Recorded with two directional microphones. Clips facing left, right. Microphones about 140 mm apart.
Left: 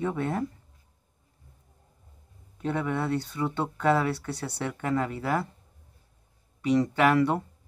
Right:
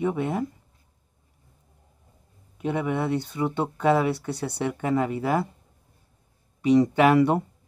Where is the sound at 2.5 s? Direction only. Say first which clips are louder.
Right 3 dB; 15° right (ahead or behind).